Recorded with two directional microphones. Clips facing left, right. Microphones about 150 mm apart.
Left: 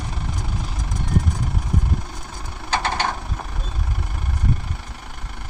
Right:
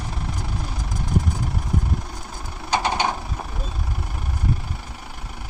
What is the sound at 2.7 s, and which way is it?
Vehicle, 10° right (ahead or behind).